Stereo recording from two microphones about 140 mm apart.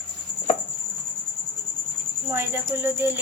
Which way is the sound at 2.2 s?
15° right (ahead or behind).